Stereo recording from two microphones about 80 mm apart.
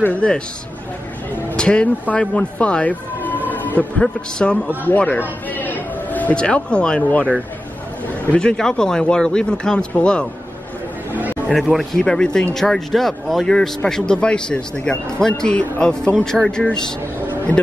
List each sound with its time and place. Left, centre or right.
0.0 s speech: centre
1.6 s speech: centre
4.0 s speech: centre
4.6 s speech: left
5.5 s a sound: left
6.3 s speech: centre
8.4 s speech: centre
11.1 s chatter: right
11.5 s speech: centre